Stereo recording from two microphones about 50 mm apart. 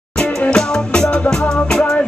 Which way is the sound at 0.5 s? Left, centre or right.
Centre.